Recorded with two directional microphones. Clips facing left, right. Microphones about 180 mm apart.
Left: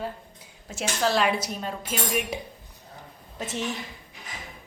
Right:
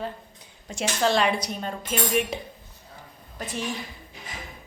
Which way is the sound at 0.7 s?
5° left (ahead or behind).